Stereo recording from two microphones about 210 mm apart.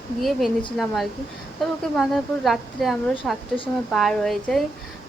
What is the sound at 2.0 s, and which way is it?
A woman's voice, centre (ahead or behind).